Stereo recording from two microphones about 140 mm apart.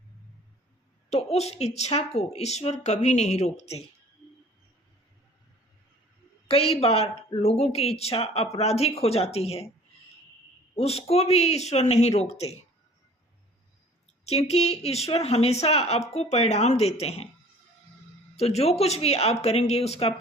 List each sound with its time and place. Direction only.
1.1 s speech: 50° left (ahead or behind)
6.5 s speech: 45° left (ahead or behind)
10.8 s speech: 45° left (ahead or behind)
14.3 s speech: 50° left (ahead or behind)
18.3 s speech: 50° left (ahead or behind)